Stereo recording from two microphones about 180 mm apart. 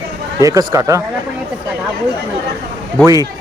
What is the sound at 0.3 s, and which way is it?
Speech, 20° right (ahead or behind).